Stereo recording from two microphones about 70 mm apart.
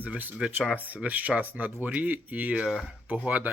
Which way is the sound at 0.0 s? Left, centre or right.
Right.